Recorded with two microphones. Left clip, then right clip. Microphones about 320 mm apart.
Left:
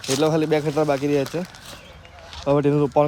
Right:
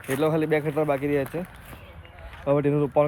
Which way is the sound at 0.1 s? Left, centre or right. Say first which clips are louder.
Left 3 dB; centre.